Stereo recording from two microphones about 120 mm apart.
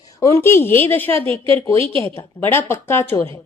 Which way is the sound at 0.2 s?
25° left (ahead or behind).